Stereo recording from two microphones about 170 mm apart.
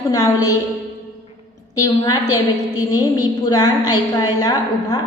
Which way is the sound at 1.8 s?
20° left (ahead or behind).